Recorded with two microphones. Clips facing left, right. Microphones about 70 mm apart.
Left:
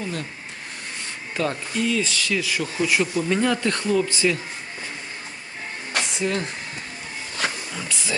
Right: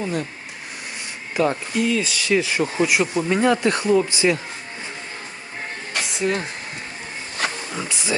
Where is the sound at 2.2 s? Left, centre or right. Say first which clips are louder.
Right 5 dB; right.